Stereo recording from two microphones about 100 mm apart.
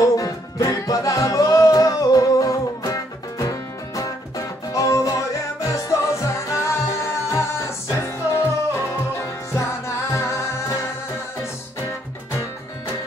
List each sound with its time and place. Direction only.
0.0 s music: 35° left (ahead or behind)